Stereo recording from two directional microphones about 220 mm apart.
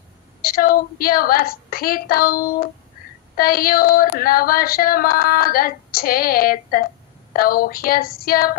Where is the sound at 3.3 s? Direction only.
40° left (ahead or behind).